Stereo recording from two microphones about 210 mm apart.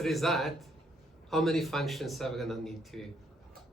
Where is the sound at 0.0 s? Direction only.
Centre (ahead or behind).